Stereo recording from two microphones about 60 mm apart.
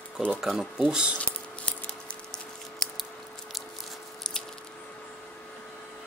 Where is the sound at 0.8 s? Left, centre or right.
Centre.